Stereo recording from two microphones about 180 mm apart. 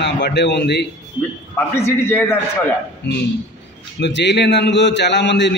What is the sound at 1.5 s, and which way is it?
Speech, 10° left (ahead or behind).